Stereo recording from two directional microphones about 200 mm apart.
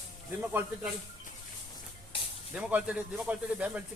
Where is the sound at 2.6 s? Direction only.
5° right (ahead or behind).